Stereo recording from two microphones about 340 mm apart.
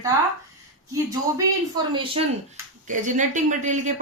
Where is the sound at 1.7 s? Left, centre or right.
Centre.